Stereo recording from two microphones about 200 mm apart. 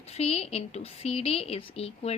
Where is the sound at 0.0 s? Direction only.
30° left (ahead or behind).